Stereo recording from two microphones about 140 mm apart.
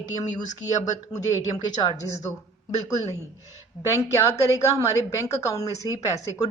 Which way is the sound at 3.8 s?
20° left (ahead or behind).